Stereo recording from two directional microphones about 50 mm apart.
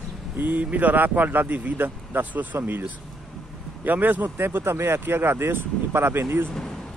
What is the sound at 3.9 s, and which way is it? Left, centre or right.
Speech, right.